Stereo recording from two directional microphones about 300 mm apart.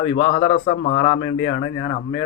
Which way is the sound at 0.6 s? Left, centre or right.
Left.